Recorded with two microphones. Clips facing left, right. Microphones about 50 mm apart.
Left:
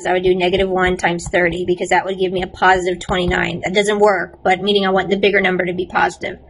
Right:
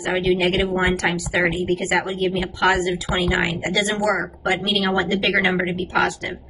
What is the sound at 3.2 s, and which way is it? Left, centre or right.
Speech, left.